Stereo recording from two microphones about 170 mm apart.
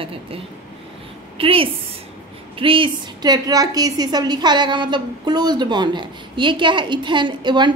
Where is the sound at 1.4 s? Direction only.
30° right (ahead or behind).